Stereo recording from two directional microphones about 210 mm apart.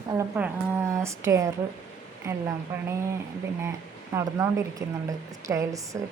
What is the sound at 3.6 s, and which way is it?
A woman's voice, 15° right (ahead or behind).